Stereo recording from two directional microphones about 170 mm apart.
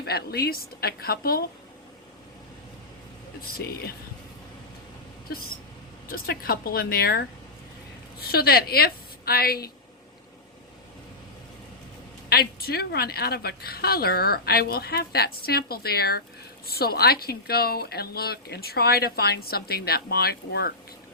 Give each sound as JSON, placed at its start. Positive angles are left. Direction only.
{"t": 0.0, "sound": "speech", "side_deg": 70}
{"t": 3.6, "sound": "speech", "side_deg": 65}
{"t": 5.3, "sound": "speech", "side_deg": 65}
{"t": 12.3, "sound": "speech", "side_deg": 65}